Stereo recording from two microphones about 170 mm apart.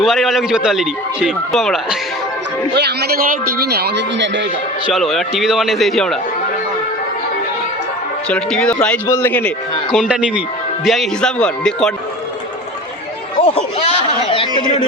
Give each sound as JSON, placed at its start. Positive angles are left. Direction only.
{"t": 0.0, "sound": "a man's voice", "side_deg": 0}
{"t": 2.7, "sound": "a man's voice", "side_deg": -75}
{"t": 4.9, "sound": "a man's voice", "side_deg": 0}
{"t": 8.3, "sound": "a man's voice", "side_deg": 5}
{"t": 9.9, "sound": "a man's voice", "side_deg": -5}
{"t": 13.4, "sound": "chatter", "side_deg": 35}